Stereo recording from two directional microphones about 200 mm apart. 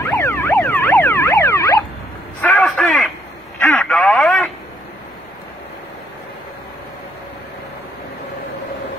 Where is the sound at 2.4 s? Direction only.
5° left (ahead or behind).